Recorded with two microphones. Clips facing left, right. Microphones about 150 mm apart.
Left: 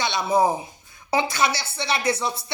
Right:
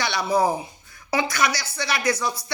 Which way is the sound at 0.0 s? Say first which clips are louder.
Left 1 dB; 25° left (ahead or behind).